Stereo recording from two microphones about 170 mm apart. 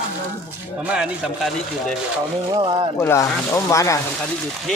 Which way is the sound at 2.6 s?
30° right (ahead or behind).